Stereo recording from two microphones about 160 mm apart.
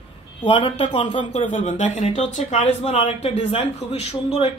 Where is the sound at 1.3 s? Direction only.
45° left (ahead or behind).